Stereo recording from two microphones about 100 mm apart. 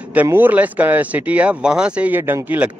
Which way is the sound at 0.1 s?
20° right (ahead or behind).